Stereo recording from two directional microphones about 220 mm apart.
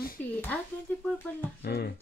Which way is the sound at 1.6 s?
45° left (ahead or behind).